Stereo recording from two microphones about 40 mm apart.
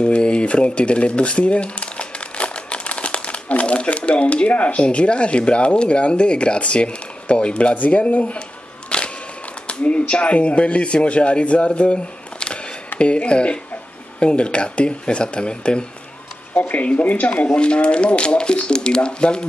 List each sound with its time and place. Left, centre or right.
0.0 s speech: left
7.7 s camera: left
9.7 s speech: left
16.5 s speech: left
17.5 s speech: left